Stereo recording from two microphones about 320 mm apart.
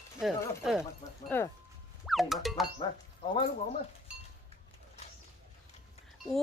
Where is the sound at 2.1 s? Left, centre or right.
Centre.